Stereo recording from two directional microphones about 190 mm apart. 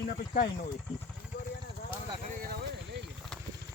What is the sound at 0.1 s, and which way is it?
Speech, 40° left (ahead or behind).